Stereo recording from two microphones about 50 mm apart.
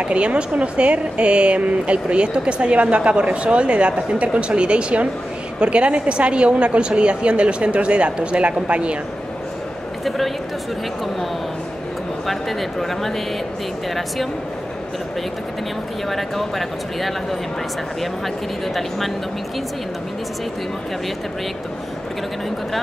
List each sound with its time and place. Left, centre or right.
0.0 s speech: right
10.0 s speech: centre
12.3 s speech: centre
16.1 s speech: centre
18.8 s speech: centre